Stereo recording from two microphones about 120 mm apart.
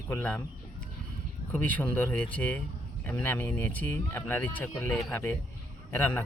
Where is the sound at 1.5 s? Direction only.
15° left (ahead or behind).